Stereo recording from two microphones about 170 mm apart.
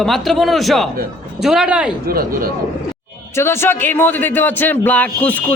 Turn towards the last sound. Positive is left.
turn(degrees=10)  # may be behind; listen again after turning